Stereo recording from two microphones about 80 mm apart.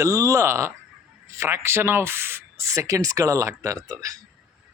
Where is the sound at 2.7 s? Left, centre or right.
Right.